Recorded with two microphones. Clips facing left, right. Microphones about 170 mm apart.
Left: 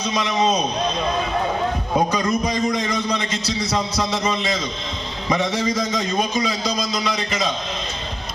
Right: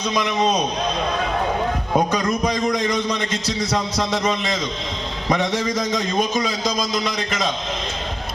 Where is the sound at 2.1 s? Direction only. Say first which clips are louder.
Even; 55° right (ahead or behind).